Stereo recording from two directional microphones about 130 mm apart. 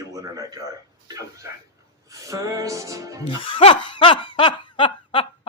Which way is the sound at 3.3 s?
40° left (ahead or behind).